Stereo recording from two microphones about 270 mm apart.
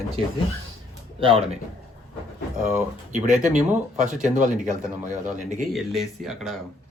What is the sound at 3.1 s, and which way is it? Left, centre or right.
Speech, right.